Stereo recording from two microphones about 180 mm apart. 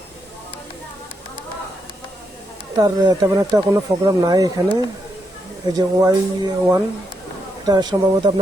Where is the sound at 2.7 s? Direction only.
20° right (ahead or behind).